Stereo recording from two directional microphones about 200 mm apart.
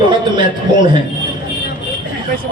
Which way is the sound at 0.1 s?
25° right (ahead or behind).